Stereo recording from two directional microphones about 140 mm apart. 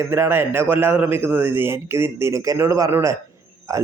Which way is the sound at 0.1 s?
15° right (ahead or behind).